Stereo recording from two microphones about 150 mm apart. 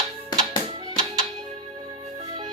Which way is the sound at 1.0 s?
45° right (ahead or behind).